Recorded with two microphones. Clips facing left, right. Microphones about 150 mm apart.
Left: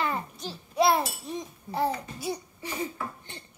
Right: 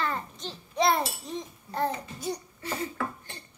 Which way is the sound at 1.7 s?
10° left (ahead or behind).